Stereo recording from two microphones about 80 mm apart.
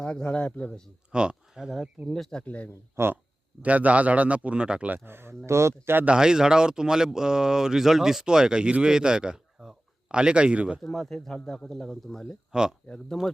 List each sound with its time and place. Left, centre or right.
0.0 s speech: centre
1.1 s speech: centre
2.5 s speech: centre
2.9 s speech: right
3.6 s speech: centre
5.0 s speech: right
6.1 s speech: centre
10.8 s speech: centre
12.5 s speech: centre
13.1 s speech: centre